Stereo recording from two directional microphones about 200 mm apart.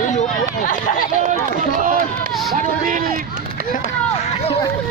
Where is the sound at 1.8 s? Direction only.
45° right (ahead or behind).